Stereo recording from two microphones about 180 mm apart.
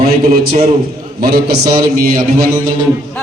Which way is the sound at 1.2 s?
60° right (ahead or behind).